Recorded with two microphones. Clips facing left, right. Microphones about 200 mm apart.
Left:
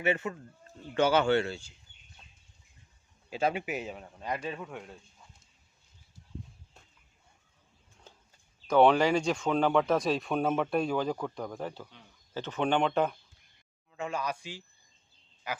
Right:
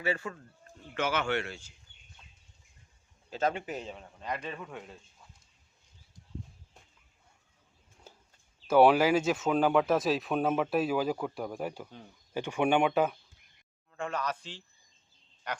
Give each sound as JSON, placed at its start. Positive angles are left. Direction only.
{"t": 0.0, "sound": "speech", "side_deg": 20}
{"t": 3.2, "sound": "a man's voice", "side_deg": 10}
{"t": 8.1, "sound": "a sound", "side_deg": -10}
{"t": 8.6, "sound": "speech", "side_deg": -5}
{"t": 13.9, "sound": "a man's voice", "side_deg": 10}